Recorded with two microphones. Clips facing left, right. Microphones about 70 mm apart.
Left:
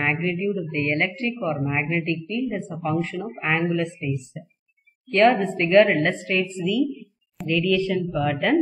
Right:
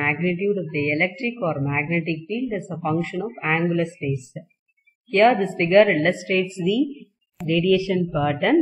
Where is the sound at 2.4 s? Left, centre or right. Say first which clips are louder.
Right 3 dB; centre.